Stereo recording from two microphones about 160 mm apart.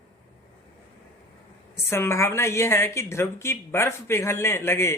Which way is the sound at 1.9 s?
15° left (ahead or behind).